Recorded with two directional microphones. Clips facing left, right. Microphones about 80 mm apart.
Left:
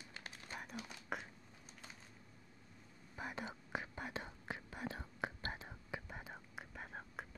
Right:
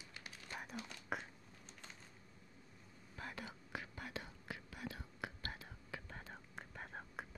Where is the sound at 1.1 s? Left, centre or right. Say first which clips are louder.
Right 1 dB; centre.